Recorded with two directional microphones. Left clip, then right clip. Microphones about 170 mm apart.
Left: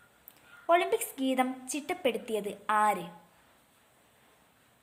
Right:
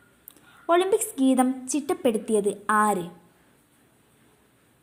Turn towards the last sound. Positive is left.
turn(degrees=-25)  # may be behind; listen again after turning